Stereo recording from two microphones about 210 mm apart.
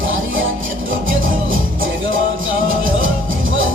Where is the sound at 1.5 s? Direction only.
70° right (ahead or behind).